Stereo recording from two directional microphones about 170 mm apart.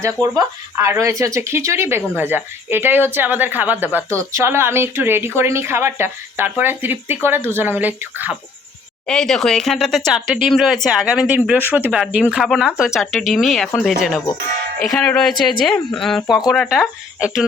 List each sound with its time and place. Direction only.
0.0 s speech: 20° right (ahead or behind)
9.0 s speech: 5° left (ahead or behind)
14.8 s speech: 5° left (ahead or behind)